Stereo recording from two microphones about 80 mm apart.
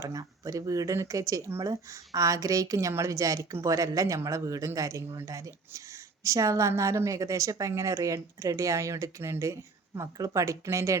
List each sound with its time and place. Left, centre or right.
0.0 s a woman's voice: right